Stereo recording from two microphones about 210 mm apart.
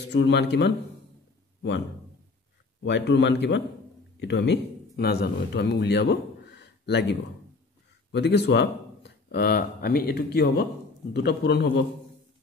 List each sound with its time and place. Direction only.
0.1 s a man's voice: 55° left (ahead or behind)
2.8 s a man's voice: 55° left (ahead or behind)